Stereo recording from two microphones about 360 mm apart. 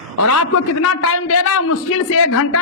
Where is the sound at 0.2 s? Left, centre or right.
Left.